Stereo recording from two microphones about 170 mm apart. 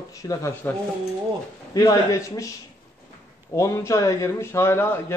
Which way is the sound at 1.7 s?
20° left (ahead or behind).